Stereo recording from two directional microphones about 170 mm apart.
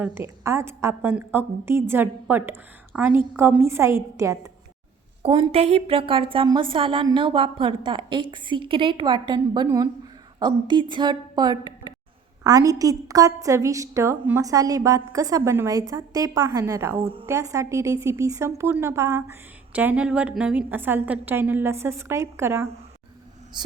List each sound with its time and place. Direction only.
0.0 s a woman's voice: 15° right (ahead or behind)
5.2 s a woman's voice: 35° right (ahead or behind)